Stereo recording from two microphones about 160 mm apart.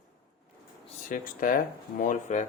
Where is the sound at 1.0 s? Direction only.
55° left (ahead or behind).